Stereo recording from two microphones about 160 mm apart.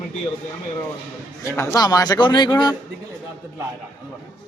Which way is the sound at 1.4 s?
15° left (ahead or behind).